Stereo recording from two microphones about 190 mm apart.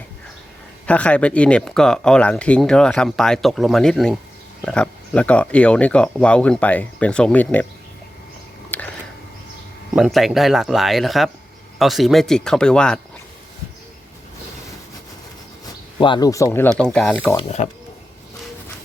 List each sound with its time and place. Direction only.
0.9 s speech: 5° left (ahead or behind)
8.7 s a sound: 10° left (ahead or behind)
9.9 s speech: centre (ahead or behind)
16.0 s speech: 25° left (ahead or behind); by 17.4 s 10° left (ahead or behind)
17.4 s speech: 35° left (ahead or behind)